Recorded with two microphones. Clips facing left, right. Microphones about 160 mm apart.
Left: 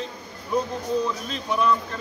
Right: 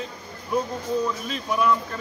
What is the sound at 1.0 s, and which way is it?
Speech, 5° right (ahead or behind).